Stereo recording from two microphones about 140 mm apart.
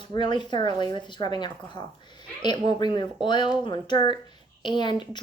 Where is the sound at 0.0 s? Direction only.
35° left (ahead or behind).